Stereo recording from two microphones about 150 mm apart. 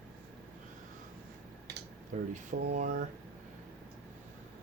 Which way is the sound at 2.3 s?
55° right (ahead or behind).